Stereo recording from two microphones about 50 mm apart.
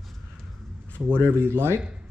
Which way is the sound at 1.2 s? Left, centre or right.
Right.